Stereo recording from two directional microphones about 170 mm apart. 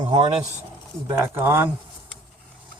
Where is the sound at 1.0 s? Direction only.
15° right (ahead or behind).